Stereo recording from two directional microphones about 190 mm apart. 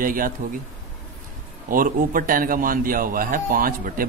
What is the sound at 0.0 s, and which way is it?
Speech, 45° right (ahead or behind).